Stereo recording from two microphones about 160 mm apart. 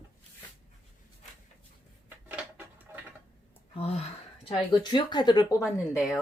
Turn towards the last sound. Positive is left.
turn(degrees=20)  # may be behind; listen again after turning